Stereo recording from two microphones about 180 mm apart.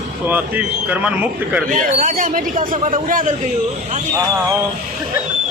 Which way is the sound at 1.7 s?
45° right (ahead or behind).